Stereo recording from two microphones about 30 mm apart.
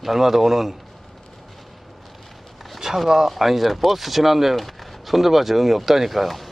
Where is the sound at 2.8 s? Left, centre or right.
Right.